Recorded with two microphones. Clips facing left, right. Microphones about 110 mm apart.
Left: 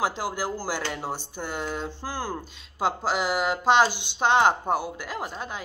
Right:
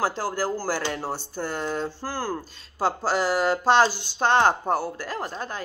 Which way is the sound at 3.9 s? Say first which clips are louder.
Right 1 dB; 40° right (ahead or behind).